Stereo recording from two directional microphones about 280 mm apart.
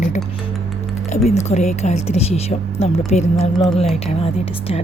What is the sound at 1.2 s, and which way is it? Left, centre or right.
Speech, left.